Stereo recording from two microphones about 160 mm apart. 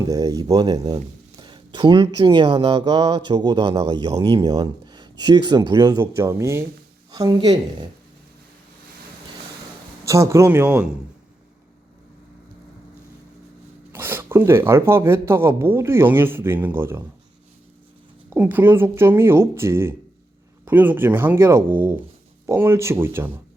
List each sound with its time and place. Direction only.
0.0 s speech: 20° right (ahead or behind)
4.4 s speech: 25° right (ahead or behind)
10.1 s speech: 20° right (ahead or behind)
13.9 s speech: 15° right (ahead or behind)
18.3 s speech: 10° right (ahead or behind)